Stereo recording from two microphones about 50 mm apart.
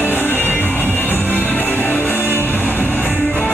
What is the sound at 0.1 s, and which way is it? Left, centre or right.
Music, left.